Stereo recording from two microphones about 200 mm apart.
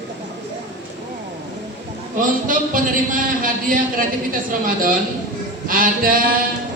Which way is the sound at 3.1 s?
45° right (ahead or behind).